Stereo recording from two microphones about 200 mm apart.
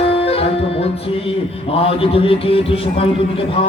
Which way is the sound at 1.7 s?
30° left (ahead or behind).